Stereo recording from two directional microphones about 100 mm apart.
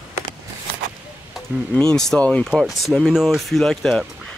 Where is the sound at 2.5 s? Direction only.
5° right (ahead or behind).